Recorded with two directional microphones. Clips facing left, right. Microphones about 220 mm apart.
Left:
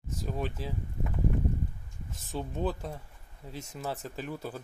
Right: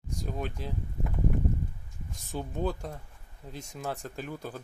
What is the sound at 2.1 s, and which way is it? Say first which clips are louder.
Speech: even; centre (ahead or behind).